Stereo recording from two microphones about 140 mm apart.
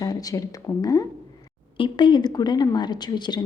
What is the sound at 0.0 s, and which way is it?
A woman's voice, 25° left (ahead or behind).